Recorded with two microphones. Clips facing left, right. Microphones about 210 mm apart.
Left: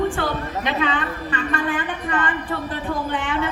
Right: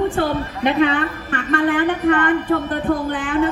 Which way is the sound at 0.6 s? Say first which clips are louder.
Right 8 dB; 55° right (ahead or behind).